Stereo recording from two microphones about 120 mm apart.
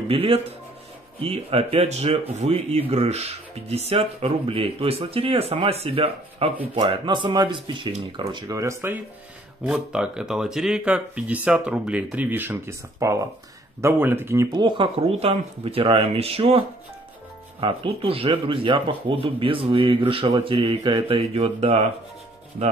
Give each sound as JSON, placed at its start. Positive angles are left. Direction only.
{"t": 0.1, "sound": "speech", "side_deg": -55}
{"t": 6.7, "sound": "speech", "side_deg": -45}
{"t": 9.7, "sound": "speech", "side_deg": -5}
{"t": 13.0, "sound": "speech", "side_deg": -25}
{"t": 14.5, "sound": "speech", "side_deg": -40}